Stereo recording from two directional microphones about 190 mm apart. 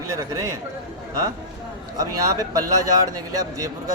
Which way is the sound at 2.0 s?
15° right (ahead or behind).